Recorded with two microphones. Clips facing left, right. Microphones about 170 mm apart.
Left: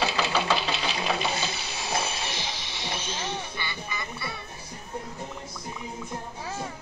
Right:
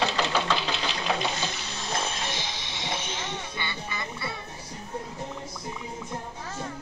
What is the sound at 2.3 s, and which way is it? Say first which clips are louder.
Music: even; 20° right (ahead or behind).